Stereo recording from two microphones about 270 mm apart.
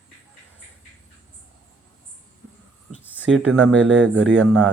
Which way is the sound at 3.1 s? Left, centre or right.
Centre.